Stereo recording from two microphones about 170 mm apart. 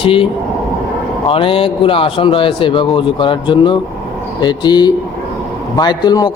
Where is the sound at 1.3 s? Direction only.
30° left (ahead or behind).